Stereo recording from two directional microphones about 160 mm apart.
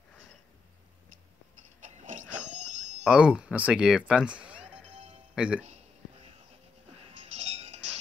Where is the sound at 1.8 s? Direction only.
50° right (ahead or behind).